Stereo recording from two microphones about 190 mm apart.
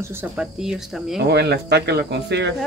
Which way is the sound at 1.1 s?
60° right (ahead or behind).